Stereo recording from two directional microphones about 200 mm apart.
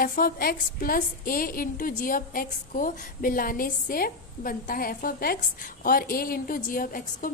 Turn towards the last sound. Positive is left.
turn(degrees=45)  # may be behind; listen again after turning